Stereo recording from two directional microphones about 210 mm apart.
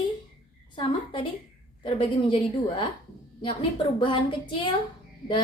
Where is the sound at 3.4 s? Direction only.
25° left (ahead or behind).